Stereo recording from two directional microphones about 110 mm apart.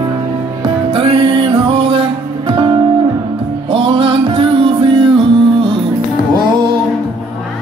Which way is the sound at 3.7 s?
65° right (ahead or behind).